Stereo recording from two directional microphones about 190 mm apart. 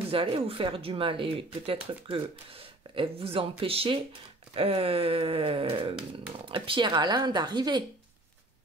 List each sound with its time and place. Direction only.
0.1 s speech: 30° right (ahead or behind)